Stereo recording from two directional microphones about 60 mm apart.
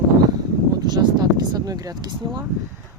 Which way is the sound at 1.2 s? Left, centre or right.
Right.